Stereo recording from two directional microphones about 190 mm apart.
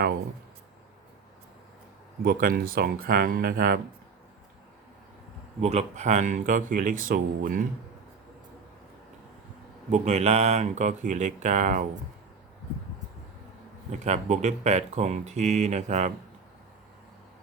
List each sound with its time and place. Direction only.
2.2 s speech: 50° right (ahead or behind)
5.5 s speech: 35° right (ahead or behind)
9.9 s speech: 35° right (ahead or behind)
13.9 s speech: 40° right (ahead or behind)